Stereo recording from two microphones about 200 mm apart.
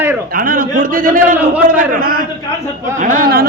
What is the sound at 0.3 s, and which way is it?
A man's voice, 45° right (ahead or behind).